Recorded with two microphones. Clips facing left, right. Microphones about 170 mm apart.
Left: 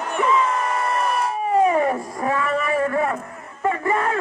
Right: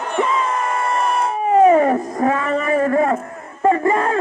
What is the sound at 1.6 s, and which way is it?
Wail, 45° right (ahead or behind).